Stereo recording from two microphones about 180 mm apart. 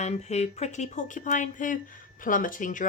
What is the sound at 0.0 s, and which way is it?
Speech, 40° left (ahead or behind).